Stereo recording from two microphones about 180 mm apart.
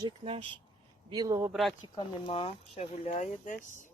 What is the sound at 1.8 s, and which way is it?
Speech, 25° left (ahead or behind).